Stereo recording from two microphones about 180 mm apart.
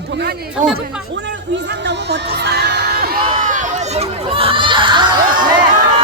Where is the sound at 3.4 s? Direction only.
45° right (ahead or behind); by 5.6 s 25° right (ahead or behind).